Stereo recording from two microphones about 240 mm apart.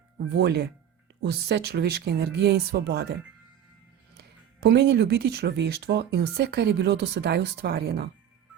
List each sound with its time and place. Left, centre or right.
0.3 s speech: right
4.1 s speech: right